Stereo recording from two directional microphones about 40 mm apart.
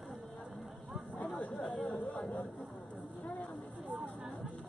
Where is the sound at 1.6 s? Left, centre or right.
Centre.